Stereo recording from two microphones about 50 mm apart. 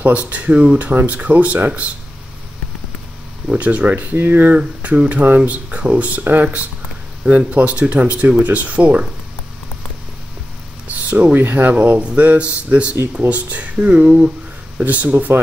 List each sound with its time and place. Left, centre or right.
0.1 s speech: right
3.4 s speech: right
10.9 s a sound: right
11.3 s speech: right
12.0 s speech: right